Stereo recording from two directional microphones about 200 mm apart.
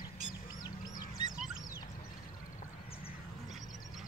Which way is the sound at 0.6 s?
20° left (ahead or behind).